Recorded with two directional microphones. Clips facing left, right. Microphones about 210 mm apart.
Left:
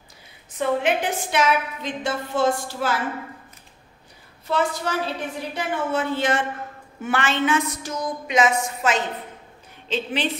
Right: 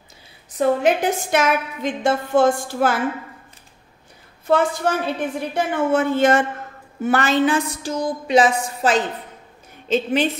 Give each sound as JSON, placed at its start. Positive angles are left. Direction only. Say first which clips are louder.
{"t": 0.6, "sound": "a woman's voice", "louder": "right 4 dB", "side_deg": -40}
{"t": 4.5, "sound": "a woman's voice", "louder": "right 5 dB", "side_deg": -50}
{"t": 9.8, "sound": "a woman's voice", "louder": "right 7 dB", "side_deg": -45}